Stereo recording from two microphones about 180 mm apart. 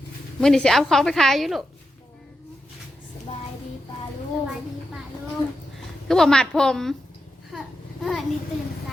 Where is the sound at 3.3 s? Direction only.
35° left (ahead or behind).